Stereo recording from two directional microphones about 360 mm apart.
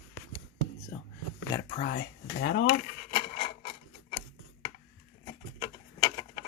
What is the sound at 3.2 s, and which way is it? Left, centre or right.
Filing, centre.